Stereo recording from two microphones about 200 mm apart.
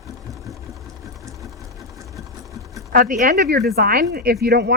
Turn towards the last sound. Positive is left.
turn(degrees=-55)  # may be behind; listen again after turning